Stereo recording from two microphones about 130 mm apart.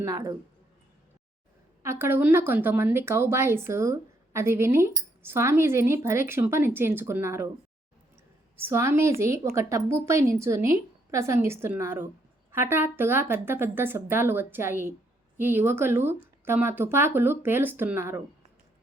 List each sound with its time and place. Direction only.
0.0 s speech: 25° right (ahead or behind)
1.8 s speech: 20° right (ahead or behind)
8.5 s speech: 20° right (ahead or behind)